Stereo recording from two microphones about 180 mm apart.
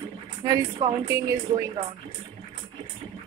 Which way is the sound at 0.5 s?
20° right (ahead or behind).